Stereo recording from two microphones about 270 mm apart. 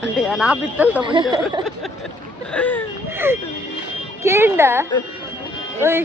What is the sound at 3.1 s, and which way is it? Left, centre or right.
Speech, centre.